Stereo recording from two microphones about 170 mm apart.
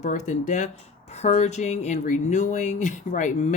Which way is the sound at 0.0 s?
45° left (ahead or behind).